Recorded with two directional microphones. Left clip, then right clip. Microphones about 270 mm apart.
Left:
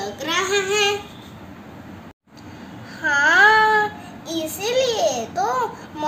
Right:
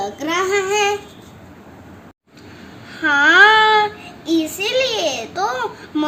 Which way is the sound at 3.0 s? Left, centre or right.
Right.